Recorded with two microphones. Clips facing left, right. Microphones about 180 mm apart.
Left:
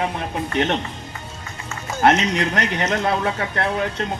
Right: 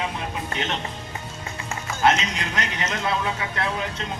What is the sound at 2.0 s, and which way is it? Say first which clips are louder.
Speech: left 5 dB; 60° left (ahead or behind).